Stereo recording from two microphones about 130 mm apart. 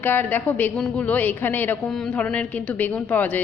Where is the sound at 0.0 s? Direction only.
15° left (ahead or behind).